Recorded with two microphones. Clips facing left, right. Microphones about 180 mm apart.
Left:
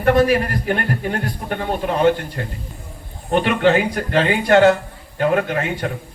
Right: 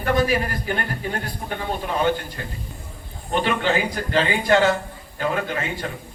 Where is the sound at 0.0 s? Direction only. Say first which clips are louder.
Left 6 dB; 65° left (ahead or behind).